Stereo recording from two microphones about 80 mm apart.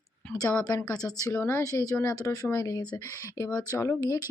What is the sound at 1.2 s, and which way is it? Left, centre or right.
Speech, left.